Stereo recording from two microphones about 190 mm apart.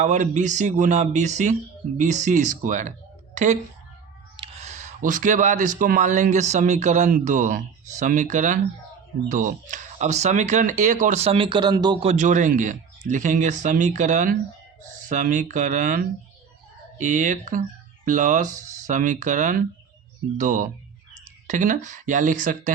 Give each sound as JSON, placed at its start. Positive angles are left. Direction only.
{"t": 0.0, "sound": "speech", "side_deg": -40}
{"t": 4.6, "sound": "speech", "side_deg": -40}
{"t": 12.1, "sound": "speech", "side_deg": -40}